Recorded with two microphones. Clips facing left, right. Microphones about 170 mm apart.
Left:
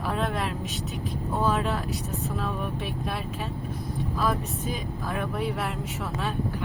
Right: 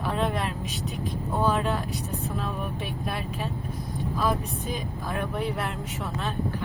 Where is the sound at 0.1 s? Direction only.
Centre (ahead or behind).